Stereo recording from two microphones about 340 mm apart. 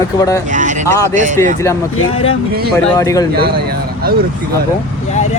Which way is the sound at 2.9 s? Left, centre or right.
Centre.